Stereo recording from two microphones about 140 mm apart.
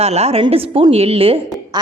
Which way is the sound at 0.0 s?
50° right (ahead or behind).